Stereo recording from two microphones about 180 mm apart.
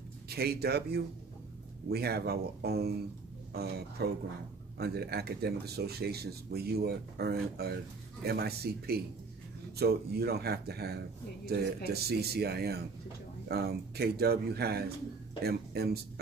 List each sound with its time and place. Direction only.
0.3 s speech: 60° right (ahead or behind)